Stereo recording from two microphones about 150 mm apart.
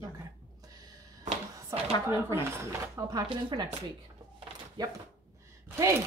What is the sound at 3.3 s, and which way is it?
Speech, 35° right (ahead or behind).